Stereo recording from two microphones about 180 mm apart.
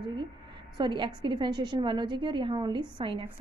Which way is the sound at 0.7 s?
25° right (ahead or behind).